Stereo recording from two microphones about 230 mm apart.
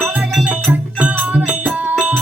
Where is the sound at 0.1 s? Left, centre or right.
Centre.